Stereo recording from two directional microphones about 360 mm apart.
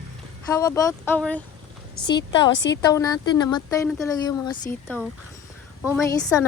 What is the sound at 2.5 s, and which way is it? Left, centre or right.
Speech, left.